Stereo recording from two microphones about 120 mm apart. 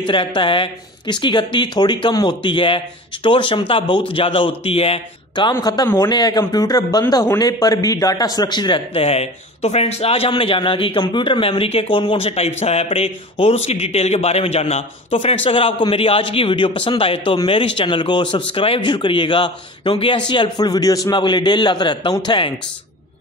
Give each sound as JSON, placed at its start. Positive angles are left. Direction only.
{"t": 0.0, "sound": "a man's voice", "side_deg": 45}